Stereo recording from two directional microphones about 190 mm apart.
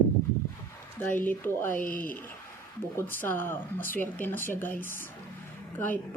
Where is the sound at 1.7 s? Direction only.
45° left (ahead or behind).